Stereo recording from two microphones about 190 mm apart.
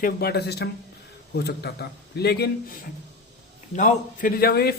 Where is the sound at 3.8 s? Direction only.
45° left (ahead or behind).